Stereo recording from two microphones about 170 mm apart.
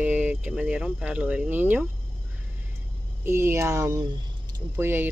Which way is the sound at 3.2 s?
15° right (ahead or behind).